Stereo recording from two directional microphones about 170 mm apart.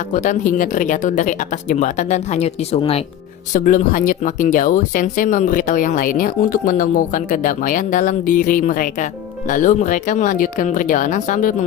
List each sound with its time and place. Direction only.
0.1 s speech: 45° left (ahead or behind)
3.5 s speech: 45° left (ahead or behind)